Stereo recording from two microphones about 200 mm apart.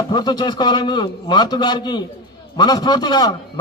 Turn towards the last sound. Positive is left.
turn(degrees=20)  # may be behind; listen again after turning